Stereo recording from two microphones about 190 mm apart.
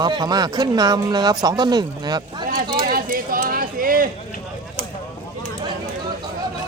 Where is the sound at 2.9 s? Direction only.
50° right (ahead or behind).